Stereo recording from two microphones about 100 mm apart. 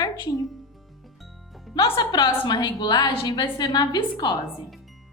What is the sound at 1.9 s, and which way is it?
A woman's voice, 45° left (ahead or behind).